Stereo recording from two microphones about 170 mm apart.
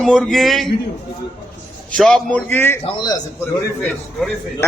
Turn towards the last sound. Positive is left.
turn(degrees=0)  # may be behind; listen again after turning